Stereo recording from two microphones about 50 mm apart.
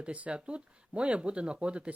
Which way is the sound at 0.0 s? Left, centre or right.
Right.